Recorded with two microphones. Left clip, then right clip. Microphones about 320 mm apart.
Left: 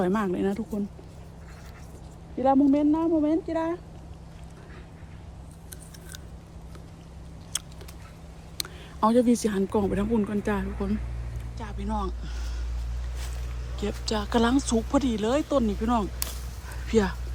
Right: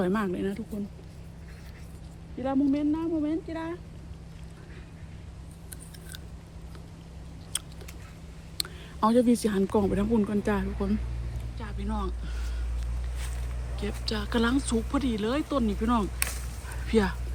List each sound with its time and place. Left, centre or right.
0.0 s speech: centre
2.4 s speech: centre
7.5 s a sound: centre
8.5 s speech: centre
13.7 s speech: centre
16.6 s dog: centre